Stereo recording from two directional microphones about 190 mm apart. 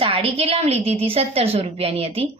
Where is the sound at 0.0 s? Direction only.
30° right (ahead or behind).